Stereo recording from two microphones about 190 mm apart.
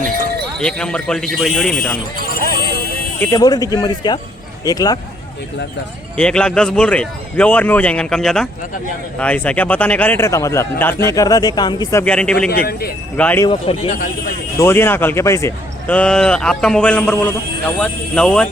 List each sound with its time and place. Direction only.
0.6 s speech: 5° left (ahead or behind)
2.1 s clip-clop: 50° right (ahead or behind)
3.2 s speech: 20° left (ahead or behind)
6.1 s speech: 5° left (ahead or behind)
12.5 s speech: 55° left (ahead or behind)
13.1 s speech: 5° left (ahead or behind)
13.4 s speech: 30° left (ahead or behind)
14.6 s speech: 10° left (ahead or behind)